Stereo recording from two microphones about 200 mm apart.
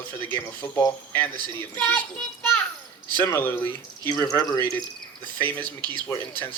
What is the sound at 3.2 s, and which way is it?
Speech, 10° left (ahead or behind).